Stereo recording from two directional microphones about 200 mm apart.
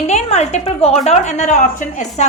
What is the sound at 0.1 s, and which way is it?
A woman's voice, 35° left (ahead or behind).